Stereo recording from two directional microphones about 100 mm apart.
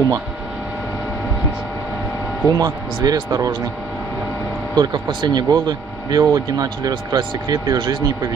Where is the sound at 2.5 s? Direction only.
35° right (ahead or behind).